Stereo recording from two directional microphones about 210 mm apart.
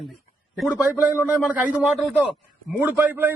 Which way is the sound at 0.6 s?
5° right (ahead or behind).